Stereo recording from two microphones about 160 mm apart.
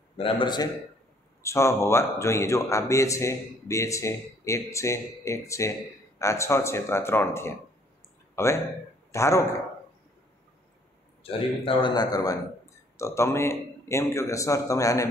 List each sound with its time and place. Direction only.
0.2 s a man's voice: 30° left (ahead or behind)
1.4 s speech: 20° left (ahead or behind)
11.2 s a man's voice: 35° left (ahead or behind)